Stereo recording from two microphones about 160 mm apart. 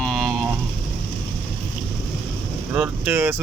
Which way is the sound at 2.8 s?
10° right (ahead or behind).